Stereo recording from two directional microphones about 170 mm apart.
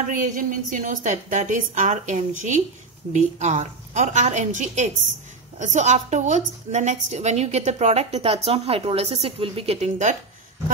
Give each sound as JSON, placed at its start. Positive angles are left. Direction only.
{"t": 0.1, "sound": "a woman's voice", "side_deg": -50}